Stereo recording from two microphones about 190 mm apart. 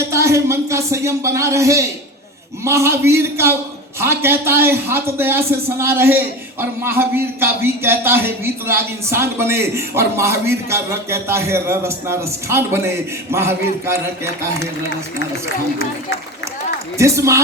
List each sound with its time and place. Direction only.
0.1 s a man's voice: 15° right (ahead or behind)
17.0 s a man's voice: 15° right (ahead or behind)